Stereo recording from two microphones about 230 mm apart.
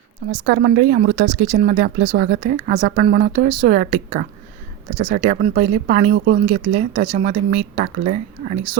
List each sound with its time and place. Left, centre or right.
0.3 s speech: right